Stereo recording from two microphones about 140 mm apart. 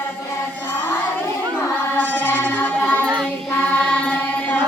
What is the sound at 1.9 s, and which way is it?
Music, 15° left (ahead or behind).